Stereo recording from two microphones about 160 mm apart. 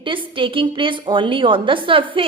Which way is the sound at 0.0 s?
30° right (ahead or behind).